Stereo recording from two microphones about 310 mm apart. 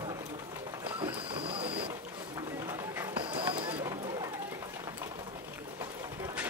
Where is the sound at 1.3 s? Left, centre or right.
Centre.